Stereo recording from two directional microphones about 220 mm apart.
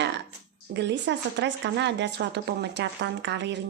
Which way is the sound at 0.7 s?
50° right (ahead or behind).